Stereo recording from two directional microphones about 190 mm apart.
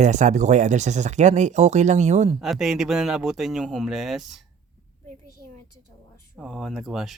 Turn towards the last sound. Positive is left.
turn(degrees=0)  # may be behind; listen again after turning